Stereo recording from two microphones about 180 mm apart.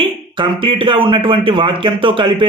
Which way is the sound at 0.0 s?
25° right (ahead or behind).